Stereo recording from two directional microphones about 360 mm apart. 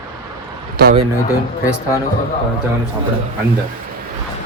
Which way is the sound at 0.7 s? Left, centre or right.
Right.